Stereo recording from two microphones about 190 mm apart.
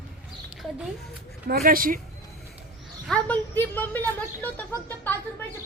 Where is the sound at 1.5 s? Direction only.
50° right (ahead or behind).